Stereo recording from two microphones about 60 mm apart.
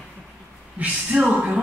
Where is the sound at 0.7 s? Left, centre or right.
Right.